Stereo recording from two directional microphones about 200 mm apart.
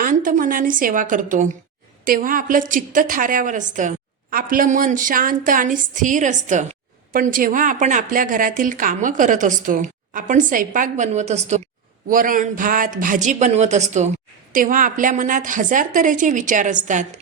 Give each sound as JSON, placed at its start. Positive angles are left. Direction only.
{"t": 0.0, "sound": "a woman's voice", "side_deg": -40}